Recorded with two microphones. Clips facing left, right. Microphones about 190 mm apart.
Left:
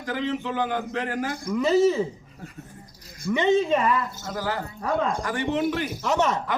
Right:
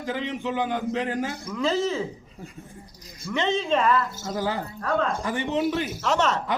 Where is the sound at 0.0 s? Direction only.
20° right (ahead or behind).